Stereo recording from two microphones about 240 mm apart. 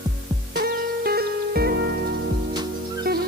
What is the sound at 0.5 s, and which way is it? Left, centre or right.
Music, right.